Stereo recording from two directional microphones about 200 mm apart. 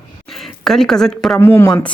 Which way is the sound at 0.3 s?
Centre (ahead or behind).